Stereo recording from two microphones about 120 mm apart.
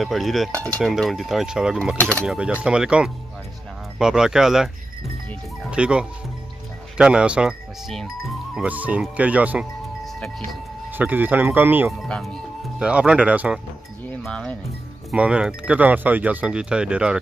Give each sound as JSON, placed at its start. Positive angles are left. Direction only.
{"t": 0.0, "sound": "speech", "side_deg": 0}
{"t": 2.0, "sound": "speech", "side_deg": 15}
{"t": 2.2, "sound": "speech", "side_deg": -10}
{"t": 5.7, "sound": "speech", "side_deg": -10}
{"t": 8.5, "sound": "speech", "side_deg": -10}
{"t": 10.9, "sound": "speech", "side_deg": -15}
{"t": 12.0, "sound": "speech", "side_deg": 5}
{"t": 14.2, "sound": "speech", "side_deg": 5}
{"t": 15.1, "sound": "speech", "side_deg": -10}